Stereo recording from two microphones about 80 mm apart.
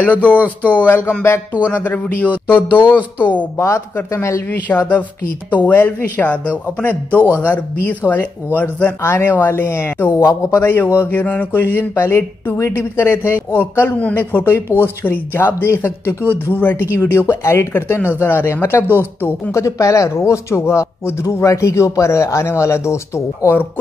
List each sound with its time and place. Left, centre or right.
0.0 s speech: centre
3.5 s a man's voice: left
4.5 s speech: left
7.1 s a man's voice: right
7.4 s a man's voice: left
19.6 s a man's voice: left